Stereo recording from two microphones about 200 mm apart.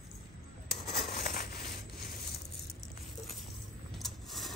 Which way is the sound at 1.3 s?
50° left (ahead or behind).